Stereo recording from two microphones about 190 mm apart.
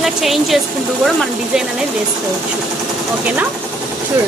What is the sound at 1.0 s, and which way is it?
Speech, centre (ahead or behind).